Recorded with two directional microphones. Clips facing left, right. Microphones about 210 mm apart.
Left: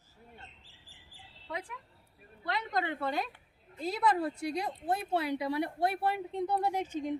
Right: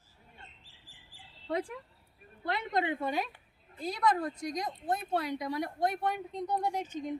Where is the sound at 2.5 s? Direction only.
20° right (ahead or behind).